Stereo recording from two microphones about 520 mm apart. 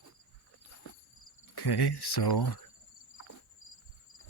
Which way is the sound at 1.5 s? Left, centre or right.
Left.